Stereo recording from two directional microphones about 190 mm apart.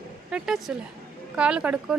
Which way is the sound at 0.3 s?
5° right (ahead or behind).